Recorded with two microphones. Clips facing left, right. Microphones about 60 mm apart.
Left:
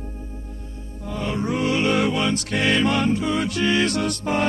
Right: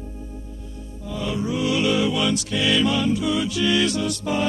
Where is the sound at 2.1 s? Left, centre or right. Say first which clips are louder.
Even; left.